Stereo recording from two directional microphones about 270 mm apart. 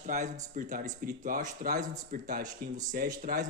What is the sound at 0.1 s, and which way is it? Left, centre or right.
Speech, right.